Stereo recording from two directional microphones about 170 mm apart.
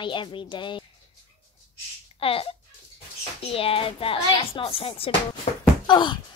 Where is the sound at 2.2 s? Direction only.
35° left (ahead or behind).